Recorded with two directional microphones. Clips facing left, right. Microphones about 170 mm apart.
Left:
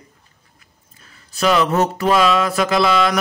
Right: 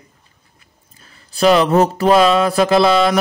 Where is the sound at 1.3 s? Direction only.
30° right (ahead or behind).